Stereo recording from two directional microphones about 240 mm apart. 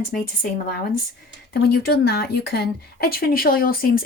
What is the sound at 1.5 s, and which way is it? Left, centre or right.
Speech, left.